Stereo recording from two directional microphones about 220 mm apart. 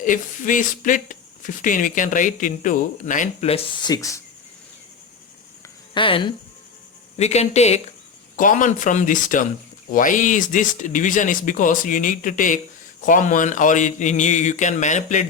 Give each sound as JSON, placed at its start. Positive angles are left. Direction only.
{"t": 0.0, "sound": "speech", "side_deg": 35}
{"t": 5.9, "sound": "speech", "side_deg": 25}